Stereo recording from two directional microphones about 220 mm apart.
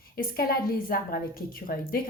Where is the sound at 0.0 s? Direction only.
40° left (ahead or behind).